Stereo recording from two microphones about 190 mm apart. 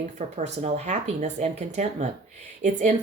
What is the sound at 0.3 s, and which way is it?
Speech, 35° right (ahead or behind).